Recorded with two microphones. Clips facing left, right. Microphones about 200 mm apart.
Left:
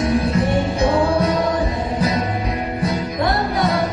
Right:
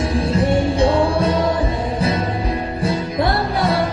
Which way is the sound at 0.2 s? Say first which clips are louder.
Right 1 dB; 30° right (ahead or behind).